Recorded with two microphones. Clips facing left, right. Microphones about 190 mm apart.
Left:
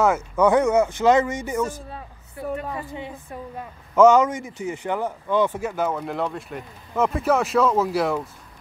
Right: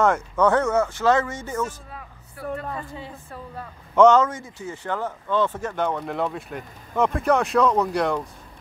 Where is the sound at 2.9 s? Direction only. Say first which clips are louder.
Left 3 dB; 20° left (ahead or behind).